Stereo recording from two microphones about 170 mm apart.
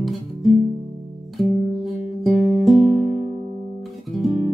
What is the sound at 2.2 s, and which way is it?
Music, centre (ahead or behind).